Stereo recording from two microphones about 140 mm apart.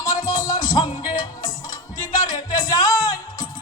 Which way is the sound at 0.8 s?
30° left (ahead or behind).